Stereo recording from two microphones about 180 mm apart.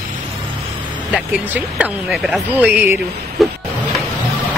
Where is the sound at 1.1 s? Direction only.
5° right (ahead or behind).